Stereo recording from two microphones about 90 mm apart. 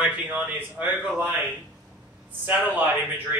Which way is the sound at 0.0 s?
15° right (ahead or behind).